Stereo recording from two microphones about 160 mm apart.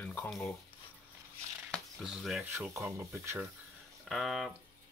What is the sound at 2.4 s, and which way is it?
Speech, 15° right (ahead or behind).